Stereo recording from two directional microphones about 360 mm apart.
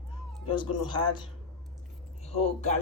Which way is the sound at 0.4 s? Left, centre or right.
Centre.